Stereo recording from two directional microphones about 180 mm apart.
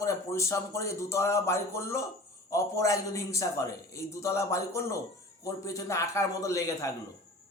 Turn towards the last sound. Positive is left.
turn(degrees=15)  # may be behind; listen again after turning